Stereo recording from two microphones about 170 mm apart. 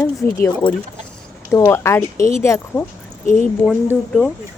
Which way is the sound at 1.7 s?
15° left (ahead or behind).